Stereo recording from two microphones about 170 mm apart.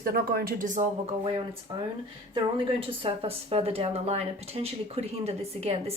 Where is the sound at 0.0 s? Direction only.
60° right (ahead or behind).